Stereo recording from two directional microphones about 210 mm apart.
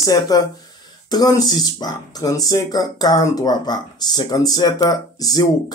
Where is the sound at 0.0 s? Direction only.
15° left (ahead or behind).